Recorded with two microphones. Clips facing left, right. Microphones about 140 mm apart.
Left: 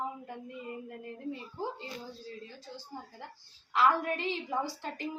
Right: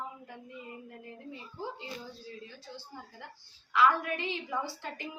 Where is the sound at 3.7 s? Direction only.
40° left (ahead or behind).